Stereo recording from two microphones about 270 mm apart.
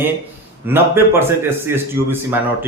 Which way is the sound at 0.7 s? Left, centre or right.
Centre.